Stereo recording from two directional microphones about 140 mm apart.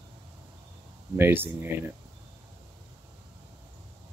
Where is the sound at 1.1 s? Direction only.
15° right (ahead or behind).